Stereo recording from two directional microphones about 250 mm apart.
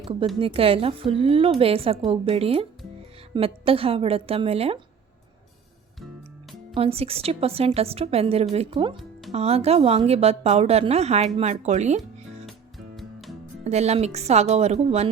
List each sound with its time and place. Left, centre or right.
0.3 s a woman's voice: right
6.7 s a woman's voice: right
13.7 s a woman's voice: right